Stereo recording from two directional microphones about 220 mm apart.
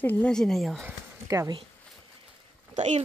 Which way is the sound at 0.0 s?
5° left (ahead or behind).